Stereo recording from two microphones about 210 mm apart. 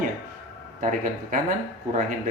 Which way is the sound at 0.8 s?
40° right (ahead or behind).